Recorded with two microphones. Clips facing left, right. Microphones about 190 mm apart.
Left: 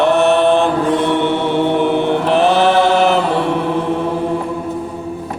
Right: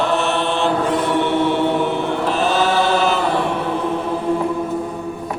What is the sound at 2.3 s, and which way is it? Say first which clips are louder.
Chant: left 6 dB; 65° left (ahead or behind).